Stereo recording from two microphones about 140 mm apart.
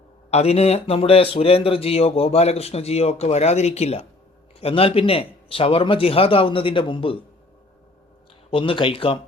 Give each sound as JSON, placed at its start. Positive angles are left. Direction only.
{"t": 0.3, "sound": "a man's voice", "side_deg": 50}
{"t": 8.4, "sound": "a man's voice", "side_deg": 40}